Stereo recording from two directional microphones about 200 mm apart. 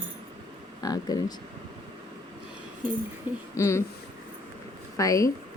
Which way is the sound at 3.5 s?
15° left (ahead or behind).